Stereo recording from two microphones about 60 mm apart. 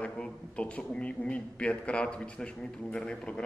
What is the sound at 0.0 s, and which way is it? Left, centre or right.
A man's voice, left.